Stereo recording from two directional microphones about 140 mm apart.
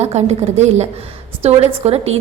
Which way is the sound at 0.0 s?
50° right (ahead or behind).